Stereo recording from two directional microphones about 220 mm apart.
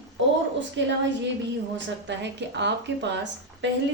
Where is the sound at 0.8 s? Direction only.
55° right (ahead or behind).